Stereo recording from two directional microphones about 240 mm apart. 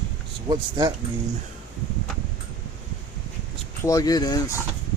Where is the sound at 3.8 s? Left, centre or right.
Centre.